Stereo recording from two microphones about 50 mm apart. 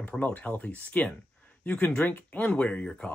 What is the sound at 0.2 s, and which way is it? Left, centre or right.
Speech, left.